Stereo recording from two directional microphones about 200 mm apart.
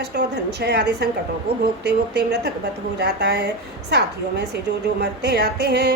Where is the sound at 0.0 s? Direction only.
55° right (ahead or behind).